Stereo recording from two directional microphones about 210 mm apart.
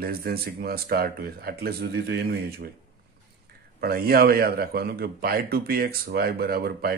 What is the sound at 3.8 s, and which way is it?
Speech, 45° right (ahead or behind).